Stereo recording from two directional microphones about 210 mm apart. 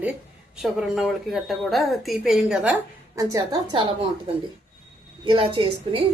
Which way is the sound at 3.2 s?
15° right (ahead or behind).